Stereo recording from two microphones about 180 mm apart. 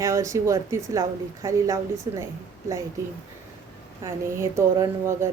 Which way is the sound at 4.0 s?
15° right (ahead or behind).